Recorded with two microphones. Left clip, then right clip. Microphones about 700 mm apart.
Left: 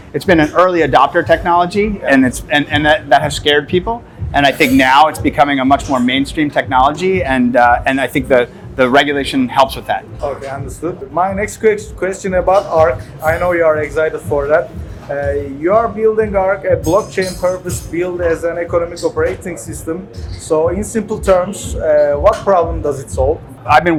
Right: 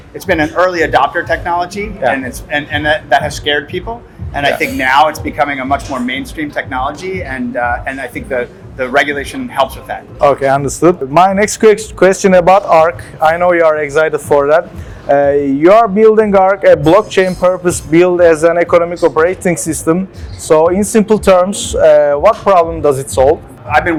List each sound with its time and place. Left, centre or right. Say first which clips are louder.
0.3 s speech: left 1 dB; left
10.8 s a man's voice: right 6 dB; right
23.6 s a man's voice: left 2 dB; left